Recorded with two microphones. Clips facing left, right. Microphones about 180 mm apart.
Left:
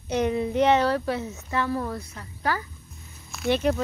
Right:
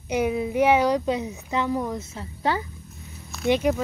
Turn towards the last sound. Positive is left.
turn(degrees=-10)  # may be behind; listen again after turning